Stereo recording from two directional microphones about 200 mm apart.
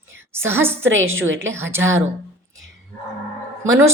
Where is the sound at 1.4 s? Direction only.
10° right (ahead or behind).